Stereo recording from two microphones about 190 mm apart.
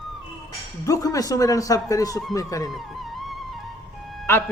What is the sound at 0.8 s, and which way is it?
Speech, 15° left (ahead or behind).